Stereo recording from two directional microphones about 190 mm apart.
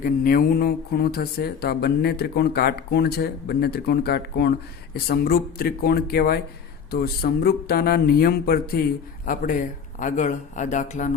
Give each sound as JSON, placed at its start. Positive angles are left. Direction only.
{"t": 0.0, "sound": "speech", "side_deg": 50}